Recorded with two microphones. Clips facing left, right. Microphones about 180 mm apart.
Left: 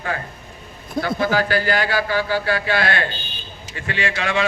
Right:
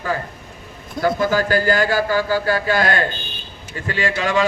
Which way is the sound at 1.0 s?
45° right (ahead or behind).